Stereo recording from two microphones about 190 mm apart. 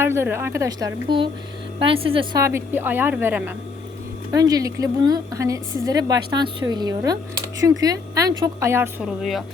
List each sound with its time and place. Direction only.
0.0 s a woman's voice: 15° right (ahead or behind)
2.4 s a woman's voice: 15° right (ahead or behind)